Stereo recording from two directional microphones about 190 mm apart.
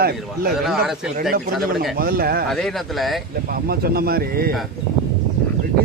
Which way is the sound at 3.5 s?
50° right (ahead or behind).